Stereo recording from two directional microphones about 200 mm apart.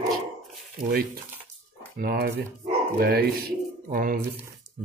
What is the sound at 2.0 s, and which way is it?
Speech, 50° right (ahead or behind).